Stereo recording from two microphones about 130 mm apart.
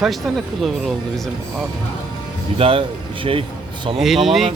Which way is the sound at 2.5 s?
45° right (ahead or behind).